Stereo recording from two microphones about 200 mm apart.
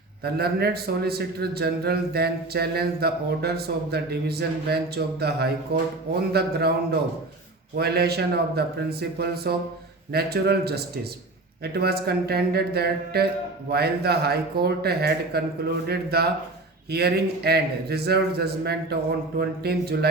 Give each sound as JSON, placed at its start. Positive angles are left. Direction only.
{"t": 0.2, "sound": "a man's voice", "side_deg": -50}
{"t": 7.8, "sound": "a man's voice", "side_deg": -55}